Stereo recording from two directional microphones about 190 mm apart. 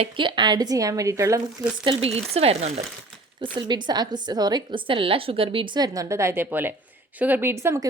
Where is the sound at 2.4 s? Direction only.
35° right (ahead or behind).